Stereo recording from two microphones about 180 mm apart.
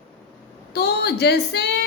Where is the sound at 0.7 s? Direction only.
65° left (ahead or behind).